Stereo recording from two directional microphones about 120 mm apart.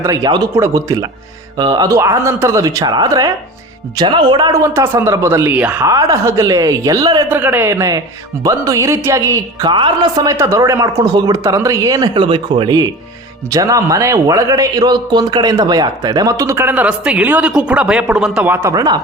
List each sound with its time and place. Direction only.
0.0 s a man's voice: 30° right (ahead or behind)
3.9 s a man's voice: 40° right (ahead or behind); by 5.8 s 15° right (ahead or behind)
5.8 s a man's voice: 30° right (ahead or behind)
7.3 s a man's voice: 15° right (ahead or behind)
9.7 s a woman's voice: 45° right (ahead or behind)
10.2 s a man's voice: 25° right (ahead or behind)
12.1 s a man's voice: 45° right (ahead or behind); by 16.6 s 25° right (ahead or behind)
16.6 s speech: 10° right (ahead or behind)
18.5 s speech: 25° right (ahead or behind)